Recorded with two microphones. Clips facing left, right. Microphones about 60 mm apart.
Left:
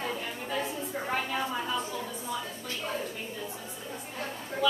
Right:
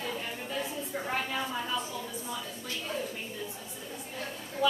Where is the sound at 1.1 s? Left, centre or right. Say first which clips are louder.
Left 2 dB; centre.